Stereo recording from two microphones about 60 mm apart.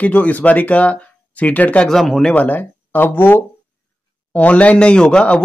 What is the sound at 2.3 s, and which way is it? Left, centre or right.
Speech, left.